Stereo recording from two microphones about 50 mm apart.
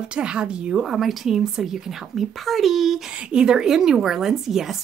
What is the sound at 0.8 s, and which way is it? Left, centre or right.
A woman's voice, centre.